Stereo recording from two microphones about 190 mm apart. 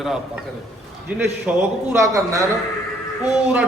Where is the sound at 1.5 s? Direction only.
5° right (ahead or behind).